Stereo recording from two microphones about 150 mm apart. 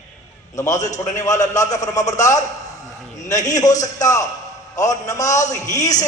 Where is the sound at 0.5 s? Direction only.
20° left (ahead or behind).